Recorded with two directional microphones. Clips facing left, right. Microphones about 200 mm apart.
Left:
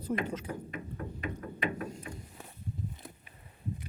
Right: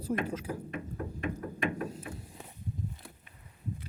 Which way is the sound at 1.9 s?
5° right (ahead or behind).